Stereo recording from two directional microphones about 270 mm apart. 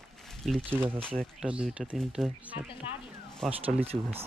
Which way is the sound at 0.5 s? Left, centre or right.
Centre.